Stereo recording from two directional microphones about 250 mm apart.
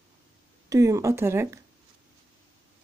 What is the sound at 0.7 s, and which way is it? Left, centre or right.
Speech, centre.